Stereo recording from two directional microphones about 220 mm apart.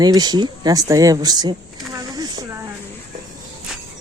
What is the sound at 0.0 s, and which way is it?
Speech, 20° right (ahead or behind).